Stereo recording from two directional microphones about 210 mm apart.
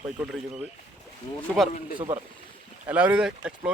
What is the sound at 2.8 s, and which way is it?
Speech, 5° right (ahead or behind).